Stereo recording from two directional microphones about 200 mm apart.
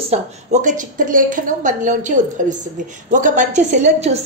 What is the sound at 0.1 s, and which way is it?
A woman's voice, 35° right (ahead or behind).